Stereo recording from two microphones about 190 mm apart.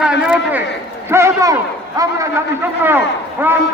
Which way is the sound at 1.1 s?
15° right (ahead or behind).